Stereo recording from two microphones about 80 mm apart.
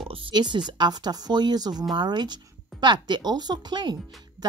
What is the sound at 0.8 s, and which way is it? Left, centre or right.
Speech, right.